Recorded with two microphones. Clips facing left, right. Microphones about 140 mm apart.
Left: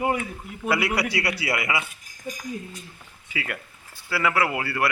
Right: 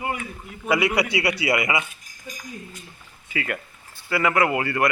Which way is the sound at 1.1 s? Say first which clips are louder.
Right 4 dB; centre (ahead or behind).